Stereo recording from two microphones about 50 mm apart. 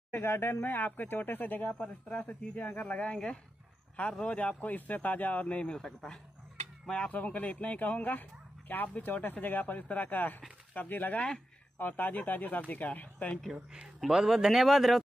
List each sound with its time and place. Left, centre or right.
0.1 s speech: left
1.8 s speech: left
6.9 s speech: left
7.2 s speech: left
13.7 s speech: centre